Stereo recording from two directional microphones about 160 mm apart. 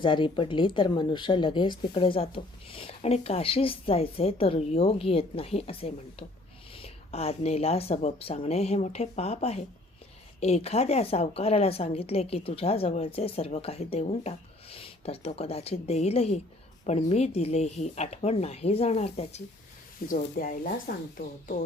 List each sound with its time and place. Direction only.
0.0 s speech: 30° left (ahead or behind)
20.1 s speech: 65° left (ahead or behind)